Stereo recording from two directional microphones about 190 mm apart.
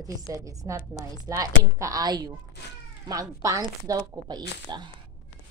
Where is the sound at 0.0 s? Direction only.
15° right (ahead or behind).